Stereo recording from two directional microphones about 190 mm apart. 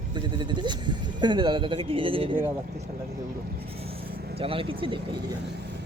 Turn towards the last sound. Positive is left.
turn(degrees=-30)  # may be behind; listen again after turning